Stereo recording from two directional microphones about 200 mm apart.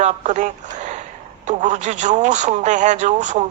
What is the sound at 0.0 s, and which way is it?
A man's voice, 35° right (ahead or behind).